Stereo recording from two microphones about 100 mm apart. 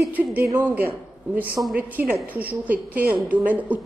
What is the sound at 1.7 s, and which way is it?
A woman's voice, 15° right (ahead or behind).